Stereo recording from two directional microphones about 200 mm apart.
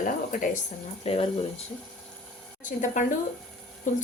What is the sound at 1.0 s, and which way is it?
Speech, 30° left (ahead or behind).